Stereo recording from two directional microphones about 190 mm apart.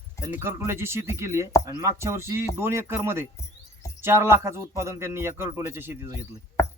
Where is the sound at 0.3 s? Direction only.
15° right (ahead or behind).